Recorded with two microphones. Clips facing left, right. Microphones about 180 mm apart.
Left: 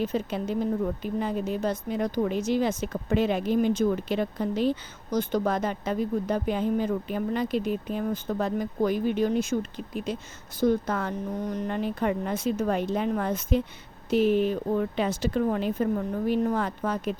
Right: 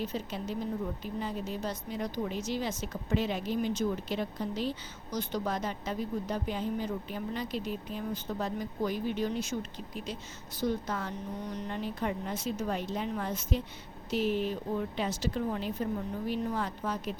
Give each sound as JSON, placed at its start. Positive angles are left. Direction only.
{"t": 0.0, "sound": "a woman's voice", "side_deg": 55}